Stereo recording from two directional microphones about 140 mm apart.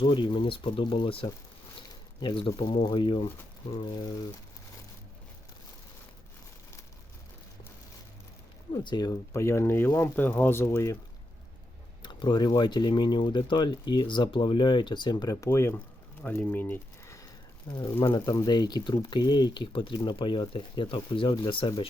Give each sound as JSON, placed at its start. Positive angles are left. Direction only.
{"t": 0.0, "sound": "speech", "side_deg": 35}
{"t": 8.7, "sound": "speech", "side_deg": 30}
{"t": 12.0, "sound": "speech", "side_deg": 35}
{"t": 17.7, "sound": "speech", "side_deg": 30}